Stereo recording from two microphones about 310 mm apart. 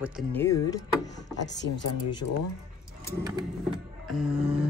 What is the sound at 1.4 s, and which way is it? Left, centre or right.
Speech, left.